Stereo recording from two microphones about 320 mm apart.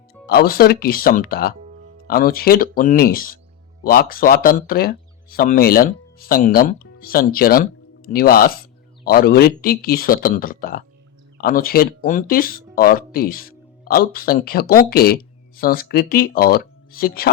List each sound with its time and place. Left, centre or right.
0.3 s speech: left